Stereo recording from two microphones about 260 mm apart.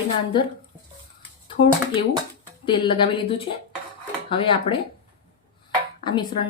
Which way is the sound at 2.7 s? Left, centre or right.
Centre.